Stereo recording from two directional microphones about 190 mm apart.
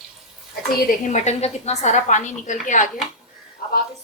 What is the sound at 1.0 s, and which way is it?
A woman's voice, 35° left (ahead or behind).